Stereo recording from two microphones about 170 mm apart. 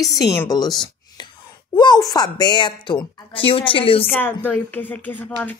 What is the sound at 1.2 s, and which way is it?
Wail, 25° left (ahead or behind).